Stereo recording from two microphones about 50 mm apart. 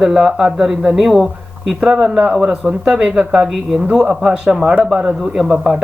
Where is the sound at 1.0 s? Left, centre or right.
Centre.